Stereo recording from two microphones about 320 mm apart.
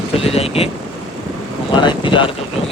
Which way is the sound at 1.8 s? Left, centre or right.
Centre.